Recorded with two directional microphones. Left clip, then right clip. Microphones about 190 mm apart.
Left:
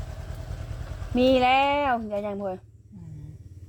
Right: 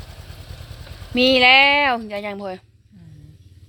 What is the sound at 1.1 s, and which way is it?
Speech, 5° right (ahead or behind).